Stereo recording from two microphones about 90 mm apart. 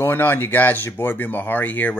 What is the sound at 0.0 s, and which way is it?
A man's voice, 25° left (ahead or behind).